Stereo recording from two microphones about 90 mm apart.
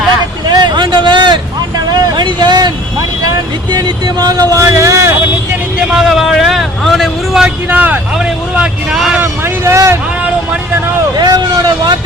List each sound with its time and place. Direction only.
0.5 s a sound: 55° right (ahead or behind)
1.9 s vehicle: 55° right (ahead or behind)
3.7 s speech: 45° right (ahead or behind)
5.9 s vehicle: 5° right (ahead or behind)
7.7 s vehicle: 20° right (ahead or behind)
9.1 s vehicle: 25° right (ahead or behind)
11.2 s vehicle: 50° right (ahead or behind)